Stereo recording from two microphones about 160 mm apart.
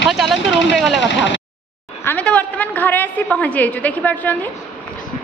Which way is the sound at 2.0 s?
10° left (ahead or behind).